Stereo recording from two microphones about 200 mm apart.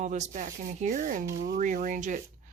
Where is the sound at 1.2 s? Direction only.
15° right (ahead or behind).